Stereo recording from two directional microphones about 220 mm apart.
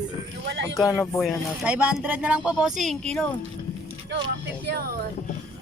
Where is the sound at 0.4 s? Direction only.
50° right (ahead or behind).